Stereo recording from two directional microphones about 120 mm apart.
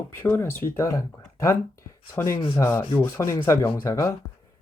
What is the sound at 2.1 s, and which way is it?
Speech, 25° left (ahead or behind).